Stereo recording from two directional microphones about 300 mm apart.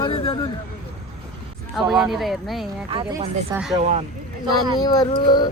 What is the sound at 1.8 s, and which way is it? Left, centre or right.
Speech, centre.